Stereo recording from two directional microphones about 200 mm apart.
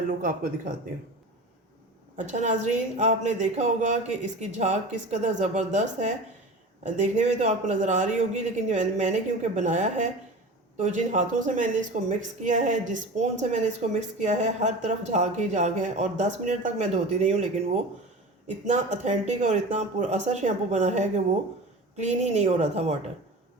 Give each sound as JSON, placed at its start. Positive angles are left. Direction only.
{"t": 0.1, "sound": "a woman's voice", "side_deg": -40}
{"t": 2.1, "sound": "a woman's voice", "side_deg": -35}